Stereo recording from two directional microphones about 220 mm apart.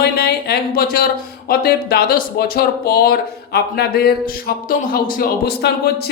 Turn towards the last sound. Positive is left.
turn(degrees=45)  # may be behind; listen again after turning